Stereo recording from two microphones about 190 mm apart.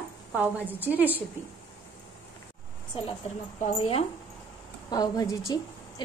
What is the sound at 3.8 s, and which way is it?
A woman's voice, 30° left (ahead or behind).